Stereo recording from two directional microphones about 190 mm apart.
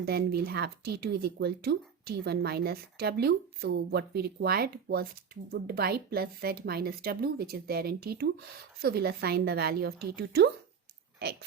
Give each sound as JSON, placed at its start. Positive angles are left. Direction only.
{"t": 0.0, "sound": "speech", "side_deg": -55}